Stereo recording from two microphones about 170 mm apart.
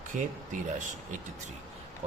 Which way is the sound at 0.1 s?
50° right (ahead or behind).